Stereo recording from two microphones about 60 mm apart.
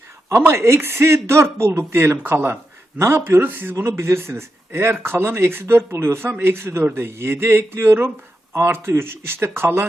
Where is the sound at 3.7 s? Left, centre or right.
Right.